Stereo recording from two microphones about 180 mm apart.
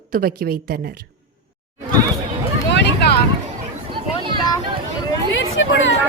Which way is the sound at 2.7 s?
75° left (ahead or behind).